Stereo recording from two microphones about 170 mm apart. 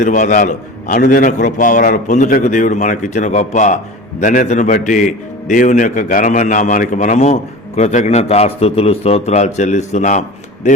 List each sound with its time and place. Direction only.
0.0 s a man's voice: 50° left (ahead or behind)